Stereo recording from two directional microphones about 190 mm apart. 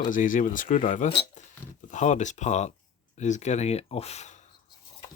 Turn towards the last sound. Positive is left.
turn(degrees=35)  # may be behind; listen again after turning